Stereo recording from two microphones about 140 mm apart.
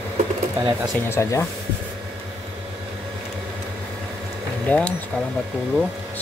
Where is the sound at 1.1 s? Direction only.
20° left (ahead or behind).